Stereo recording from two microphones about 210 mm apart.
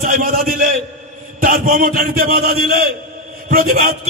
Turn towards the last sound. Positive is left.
turn(degrees=-40)  # may be behind; listen again after turning